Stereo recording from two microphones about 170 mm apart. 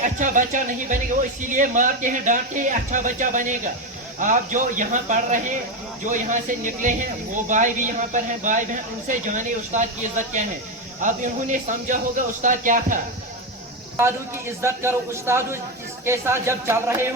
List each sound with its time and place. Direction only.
0.0 s speech: 50° right (ahead or behind)
6.8 s speech: 50° right (ahead or behind)
14.6 s speech: 15° right (ahead or behind)